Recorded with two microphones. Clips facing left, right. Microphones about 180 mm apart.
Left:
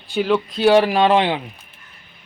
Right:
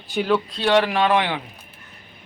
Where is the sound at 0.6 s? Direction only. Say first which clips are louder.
Left 6 dB; 25° left (ahead or behind).